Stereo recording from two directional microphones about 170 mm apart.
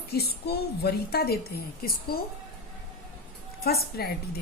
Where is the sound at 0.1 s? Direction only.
70° left (ahead or behind).